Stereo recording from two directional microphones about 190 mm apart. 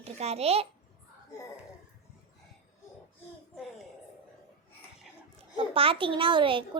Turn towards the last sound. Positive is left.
turn(degrees=-25)  # may be behind; listen again after turning